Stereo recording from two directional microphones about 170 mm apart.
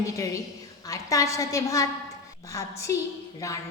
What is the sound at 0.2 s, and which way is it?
A woman's voice, 20° left (ahead or behind).